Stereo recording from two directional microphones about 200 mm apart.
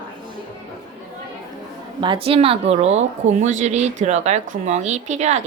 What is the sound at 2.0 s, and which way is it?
A woman's voice, 25° right (ahead or behind).